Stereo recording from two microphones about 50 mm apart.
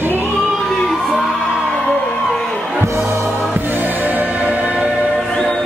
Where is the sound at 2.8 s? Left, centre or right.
Right.